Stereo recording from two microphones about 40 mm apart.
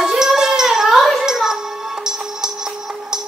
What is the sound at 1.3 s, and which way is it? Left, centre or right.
Music, centre.